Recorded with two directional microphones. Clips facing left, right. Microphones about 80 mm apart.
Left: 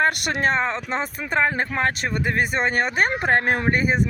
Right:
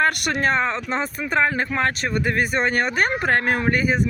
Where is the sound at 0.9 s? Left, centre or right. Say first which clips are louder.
Right 1 dB; left.